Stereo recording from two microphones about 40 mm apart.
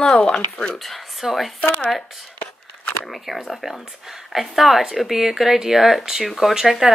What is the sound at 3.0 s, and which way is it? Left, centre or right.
Speech, centre.